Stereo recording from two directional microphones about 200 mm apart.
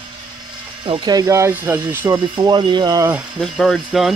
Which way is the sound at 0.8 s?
20° right (ahead or behind).